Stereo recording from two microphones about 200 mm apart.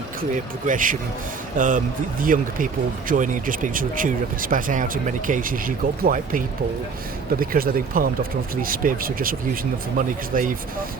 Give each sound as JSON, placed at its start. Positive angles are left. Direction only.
{"t": 0.7, "sound": "speech", "side_deg": -40}